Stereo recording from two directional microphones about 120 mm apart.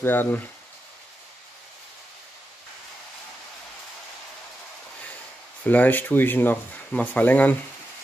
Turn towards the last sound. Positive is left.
turn(degrees=15)  # may be behind; listen again after turning